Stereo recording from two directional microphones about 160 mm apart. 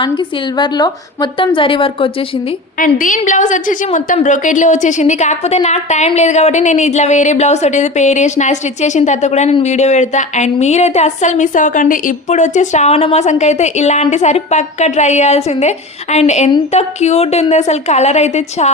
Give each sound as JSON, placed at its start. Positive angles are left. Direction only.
{"t": 0.0, "sound": "a woman's voice", "side_deg": 30}
{"t": 2.7, "sound": "a woman's voice", "side_deg": 55}